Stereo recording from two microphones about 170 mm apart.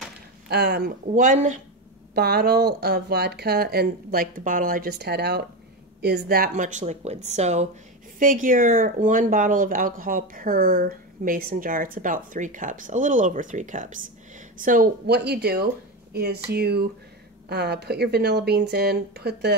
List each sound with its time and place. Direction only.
0.5 s speech: 75° right (ahead or behind)
1.0 s speech: 50° right (ahead or behind)
2.1 s speech: 70° right (ahead or behind); by 7.6 s 40° right (ahead or behind)
8.2 s speech: 50° right (ahead or behind); by 19.5 s 75° right (ahead or behind)